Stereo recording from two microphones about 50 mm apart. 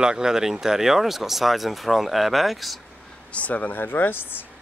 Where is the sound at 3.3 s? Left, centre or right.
Left.